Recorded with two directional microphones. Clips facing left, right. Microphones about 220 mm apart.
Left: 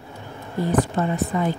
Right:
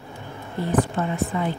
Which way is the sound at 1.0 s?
40° left (ahead or behind).